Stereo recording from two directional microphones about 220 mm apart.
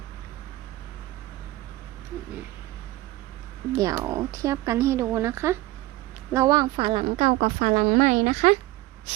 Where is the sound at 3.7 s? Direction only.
15° right (ahead or behind); by 8.6 s 30° right (ahead or behind).